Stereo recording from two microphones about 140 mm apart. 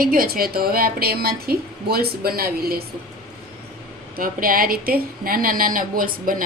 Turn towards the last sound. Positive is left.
turn(degrees=-85)